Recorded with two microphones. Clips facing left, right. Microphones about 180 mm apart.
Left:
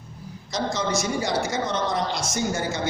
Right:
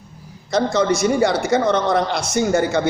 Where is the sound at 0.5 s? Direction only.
60° right (ahead or behind).